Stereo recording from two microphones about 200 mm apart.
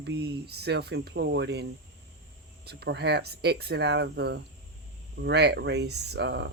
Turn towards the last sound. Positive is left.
turn(degrees=-60)  # may be behind; listen again after turning